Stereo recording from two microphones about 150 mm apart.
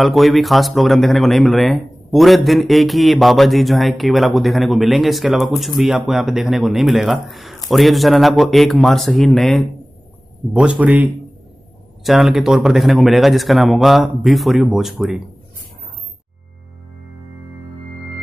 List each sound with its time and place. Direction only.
0.0 s a man's voice: centre (ahead or behind)